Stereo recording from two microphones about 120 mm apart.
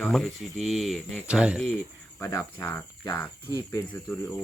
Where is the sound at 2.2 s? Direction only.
25° left (ahead or behind).